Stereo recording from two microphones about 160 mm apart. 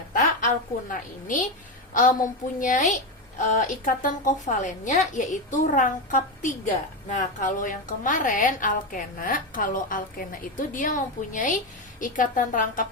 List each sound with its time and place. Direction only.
0.9 s a woman's voice: 55° left (ahead or behind)